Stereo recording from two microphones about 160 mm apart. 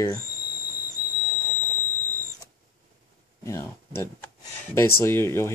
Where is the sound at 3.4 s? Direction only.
20° left (ahead or behind).